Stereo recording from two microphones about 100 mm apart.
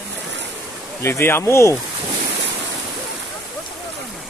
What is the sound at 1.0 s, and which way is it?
Speech, 25° left (ahead or behind).